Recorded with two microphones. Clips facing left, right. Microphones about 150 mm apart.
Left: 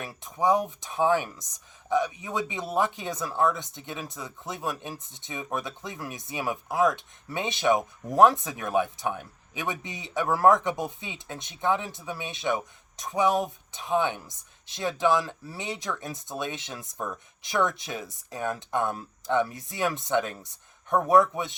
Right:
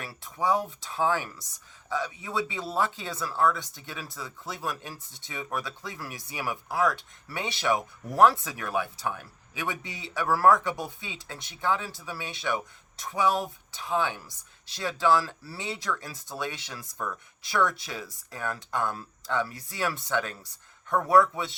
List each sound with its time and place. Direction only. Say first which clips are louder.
0.0 s speech: left 4 dB; 20° left (ahead or behind)